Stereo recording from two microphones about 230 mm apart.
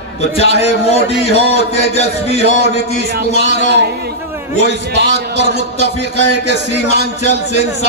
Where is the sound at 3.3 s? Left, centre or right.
Right.